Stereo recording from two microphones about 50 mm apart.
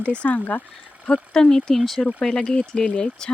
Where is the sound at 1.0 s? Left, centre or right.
Centre.